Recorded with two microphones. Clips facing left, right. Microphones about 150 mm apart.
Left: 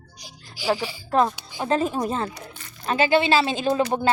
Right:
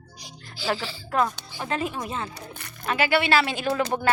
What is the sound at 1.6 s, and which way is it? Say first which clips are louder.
Speech: left 6 dB; 35° left (ahead or behind).